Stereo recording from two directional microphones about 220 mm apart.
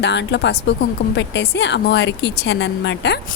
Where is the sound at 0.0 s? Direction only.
50° left (ahead or behind).